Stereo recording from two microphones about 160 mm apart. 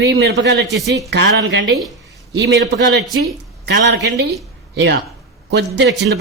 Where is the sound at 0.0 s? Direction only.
85° right.